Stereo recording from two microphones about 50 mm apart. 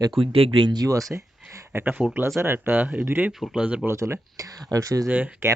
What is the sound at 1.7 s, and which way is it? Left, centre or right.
Speech, right.